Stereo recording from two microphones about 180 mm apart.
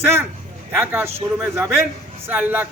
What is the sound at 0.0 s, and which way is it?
A man's voice, 15° right (ahead or behind).